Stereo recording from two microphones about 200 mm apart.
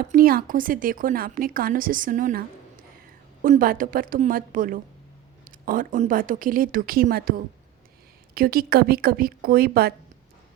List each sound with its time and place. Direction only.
0.1 s speech: 45° right (ahead or behind)
3.4 s speech: 45° right (ahead or behind)